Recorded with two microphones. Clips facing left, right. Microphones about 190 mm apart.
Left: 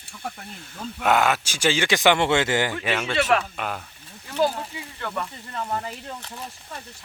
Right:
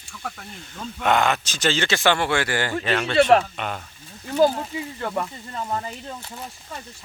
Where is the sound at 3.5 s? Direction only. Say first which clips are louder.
Even; 5° left (ahead or behind).